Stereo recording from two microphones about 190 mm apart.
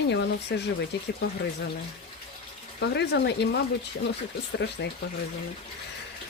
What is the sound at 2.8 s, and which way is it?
Speech, 65° left (ahead or behind).